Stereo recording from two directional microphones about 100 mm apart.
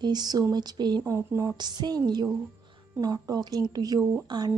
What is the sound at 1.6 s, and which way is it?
A woman's voice, 45° right (ahead or behind).